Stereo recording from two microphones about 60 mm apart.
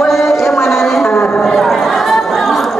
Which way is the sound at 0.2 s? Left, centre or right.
Left.